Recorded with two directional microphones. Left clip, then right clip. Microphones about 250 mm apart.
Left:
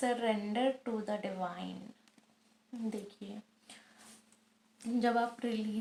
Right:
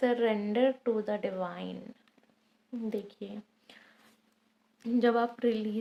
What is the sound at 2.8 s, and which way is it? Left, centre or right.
Speech, right.